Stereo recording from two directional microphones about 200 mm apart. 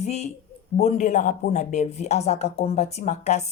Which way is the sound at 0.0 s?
35° left (ahead or behind).